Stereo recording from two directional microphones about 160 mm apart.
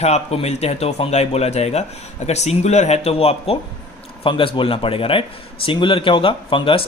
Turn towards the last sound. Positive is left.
turn(degrees=35)  # may be behind; listen again after turning